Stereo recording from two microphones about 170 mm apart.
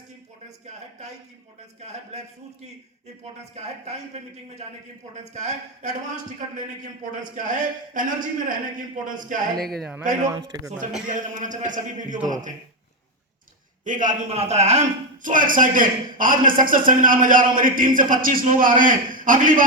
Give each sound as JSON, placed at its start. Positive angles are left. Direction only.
{"t": 3.5, "sound": "a man's voice", "side_deg": -40}
{"t": 10.2, "sound": "a man's voice", "side_deg": -20}
{"t": 11.1, "sound": "a man's voice", "side_deg": -45}
{"t": 13.8, "sound": "a man's voice", "side_deg": -50}